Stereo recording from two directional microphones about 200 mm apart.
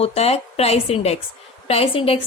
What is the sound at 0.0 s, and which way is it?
Speech, 30° left (ahead or behind).